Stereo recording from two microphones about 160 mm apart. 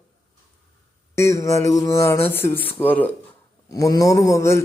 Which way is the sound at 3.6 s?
20° left (ahead or behind).